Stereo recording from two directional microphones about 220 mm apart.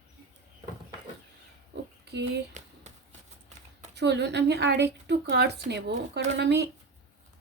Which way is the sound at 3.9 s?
50° right (ahead or behind).